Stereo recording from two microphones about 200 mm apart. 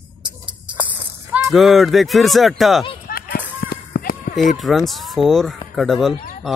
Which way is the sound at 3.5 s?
50° left (ahead or behind).